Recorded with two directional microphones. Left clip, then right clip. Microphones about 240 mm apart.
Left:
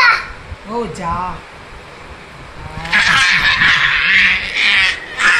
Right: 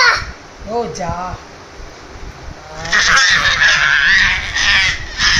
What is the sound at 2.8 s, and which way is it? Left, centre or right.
Goose, centre.